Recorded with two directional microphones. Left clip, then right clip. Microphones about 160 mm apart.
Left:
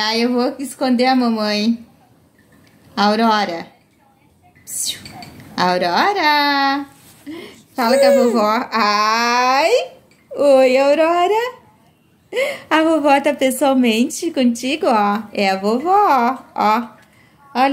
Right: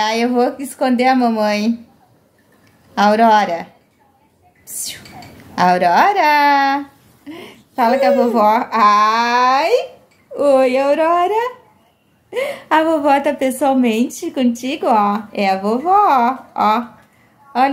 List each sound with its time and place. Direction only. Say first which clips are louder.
0.0 s a woman's voice: right 2 dB; 25° right (ahead or behind)
2.9 s a woman's voice: right 4 dB; 25° right (ahead or behind)
4.6 s a sound: left 4 dB; 25° right (ahead or behind)
5.5 s a woman's voice: right 4 dB; 25° right (ahead or behind)
7.2 s a sound: left 1 dB; 20° right (ahead or behind)
8.4 s a woman's voice: right 4 dB; 20° right (ahead or behind)